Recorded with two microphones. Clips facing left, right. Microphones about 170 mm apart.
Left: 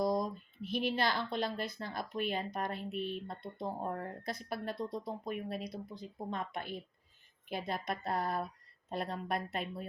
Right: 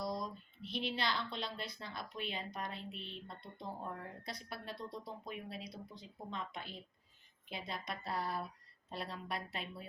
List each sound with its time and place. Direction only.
0.1 s speech: 50° left (ahead or behind)